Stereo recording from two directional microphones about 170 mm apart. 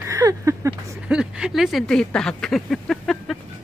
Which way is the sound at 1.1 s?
5° right (ahead or behind).